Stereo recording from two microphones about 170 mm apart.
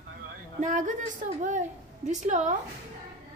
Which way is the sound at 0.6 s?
50° right (ahead or behind).